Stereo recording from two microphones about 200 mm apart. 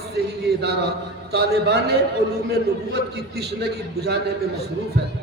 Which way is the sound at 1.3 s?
55° right (ahead or behind).